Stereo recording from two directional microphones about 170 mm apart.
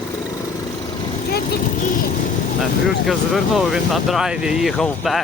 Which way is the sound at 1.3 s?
60° left (ahead or behind).